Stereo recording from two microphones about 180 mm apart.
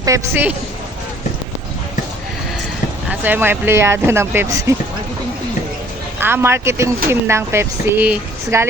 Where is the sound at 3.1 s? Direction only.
10° right (ahead or behind).